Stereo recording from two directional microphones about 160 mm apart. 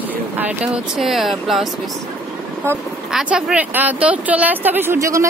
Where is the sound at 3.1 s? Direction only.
5° right (ahead or behind).